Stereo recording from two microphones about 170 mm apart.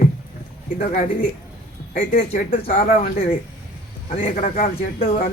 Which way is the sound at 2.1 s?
55° left (ahead or behind).